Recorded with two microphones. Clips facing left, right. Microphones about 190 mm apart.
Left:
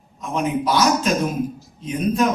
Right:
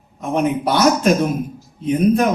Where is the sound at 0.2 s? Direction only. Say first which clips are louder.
Right 4 dB; 60° right (ahead or behind).